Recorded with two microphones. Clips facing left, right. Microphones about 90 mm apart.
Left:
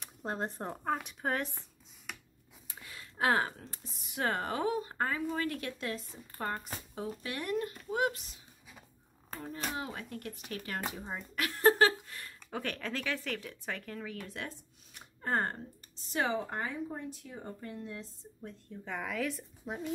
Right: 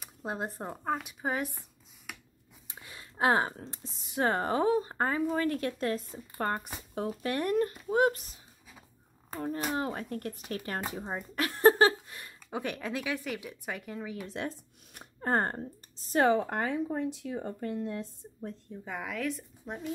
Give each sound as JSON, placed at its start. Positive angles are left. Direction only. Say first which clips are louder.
{"t": 0.0, "sound": "speech", "louder": "right 1 dB", "side_deg": -5}
{"t": 2.1, "sound": "a sound", "louder": "even", "side_deg": -5}
{"t": 2.7, "sound": "speech", "louder": "right 1 dB", "side_deg": -20}
{"t": 6.3, "sound": "speech", "louder": "right 5 dB", "side_deg": -55}
{"t": 7.2, "sound": "speech", "louder": "right 7 dB", "side_deg": -45}
{"t": 9.8, "sound": "speech", "louder": "right 6 dB", "side_deg": -40}
{"t": 15.1, "sound": "speech", "louder": "right 4 dB", "side_deg": -35}
{"t": 16.1, "sound": "speech", "louder": "right 7 dB", "side_deg": -50}
{"t": 18.9, "sound": "speech", "louder": "right 1 dB", "side_deg": -5}